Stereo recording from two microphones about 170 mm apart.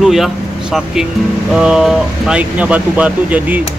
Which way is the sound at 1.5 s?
Centre (ahead or behind).